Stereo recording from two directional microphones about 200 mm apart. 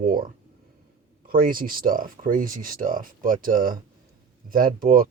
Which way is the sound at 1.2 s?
45° right (ahead or behind).